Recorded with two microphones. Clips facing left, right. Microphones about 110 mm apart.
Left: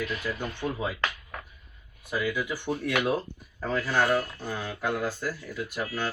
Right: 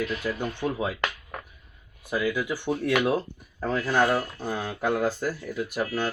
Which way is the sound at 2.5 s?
10° right (ahead or behind).